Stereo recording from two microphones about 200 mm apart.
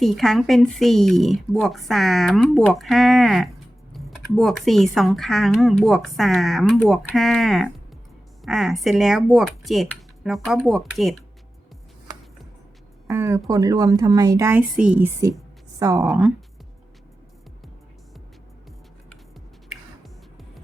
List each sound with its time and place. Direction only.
0.0 s speech: centre (ahead or behind)
13.1 s a woman's voice: 15° right (ahead or behind)
16.0 s speech: 5° right (ahead or behind)